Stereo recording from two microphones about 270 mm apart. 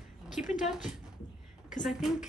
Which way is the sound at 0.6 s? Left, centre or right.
Centre.